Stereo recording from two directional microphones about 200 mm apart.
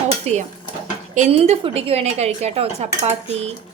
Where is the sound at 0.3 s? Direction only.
35° right (ahead or behind).